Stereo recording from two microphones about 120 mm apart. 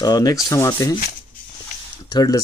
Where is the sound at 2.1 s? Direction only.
35° left (ahead or behind).